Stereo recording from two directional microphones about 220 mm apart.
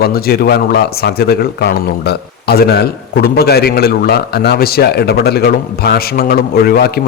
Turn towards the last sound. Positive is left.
turn(degrees=45)  # may be behind; listen again after turning